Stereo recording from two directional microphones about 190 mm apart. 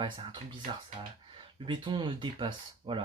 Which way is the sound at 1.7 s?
25° right (ahead or behind).